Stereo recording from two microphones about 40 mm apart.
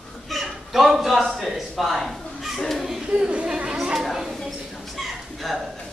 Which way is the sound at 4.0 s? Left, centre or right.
Centre.